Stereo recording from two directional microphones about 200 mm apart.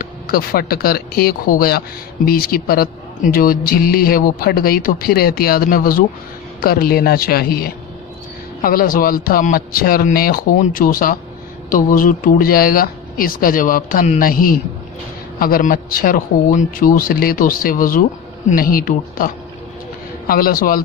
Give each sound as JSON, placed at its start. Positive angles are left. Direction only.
{"t": 0.0, "sound": "a man's voice", "side_deg": 50}